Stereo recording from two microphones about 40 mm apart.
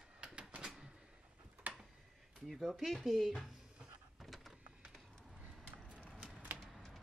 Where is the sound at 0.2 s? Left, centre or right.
Right.